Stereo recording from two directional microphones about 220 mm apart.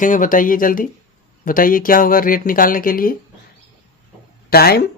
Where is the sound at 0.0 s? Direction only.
35° left (ahead or behind).